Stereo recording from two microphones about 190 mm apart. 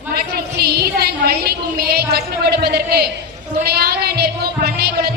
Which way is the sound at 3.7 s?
55° right (ahead or behind).